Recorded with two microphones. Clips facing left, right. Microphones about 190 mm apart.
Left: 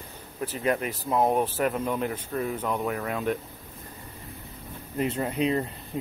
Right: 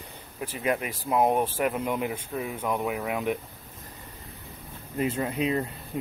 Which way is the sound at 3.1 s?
15° right (ahead or behind).